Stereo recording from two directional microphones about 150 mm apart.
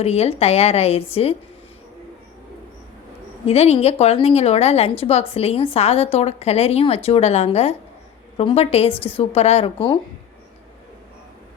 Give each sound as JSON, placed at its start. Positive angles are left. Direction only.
{"t": 0.0, "sound": "a woman's voice", "side_deg": 45}
{"t": 3.4, "sound": "a woman's voice", "side_deg": 45}